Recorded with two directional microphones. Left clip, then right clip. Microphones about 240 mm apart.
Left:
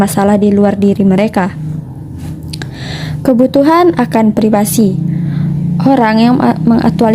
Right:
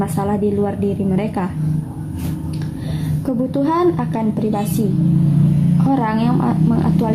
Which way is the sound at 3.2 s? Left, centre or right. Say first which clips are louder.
Left 11 dB; left.